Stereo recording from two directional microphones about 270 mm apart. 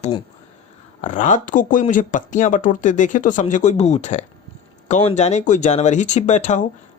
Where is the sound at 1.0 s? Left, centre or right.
Left.